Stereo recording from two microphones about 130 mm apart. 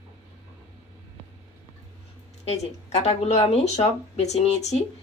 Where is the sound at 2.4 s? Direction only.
55° left (ahead or behind).